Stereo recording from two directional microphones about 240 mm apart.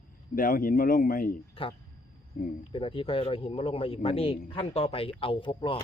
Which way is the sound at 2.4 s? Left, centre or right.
Left.